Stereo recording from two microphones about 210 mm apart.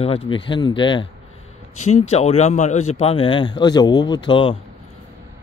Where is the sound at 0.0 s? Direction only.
25° left (ahead or behind).